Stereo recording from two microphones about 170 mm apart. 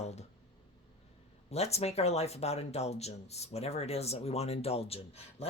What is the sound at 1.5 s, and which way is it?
Speech, 40° left (ahead or behind).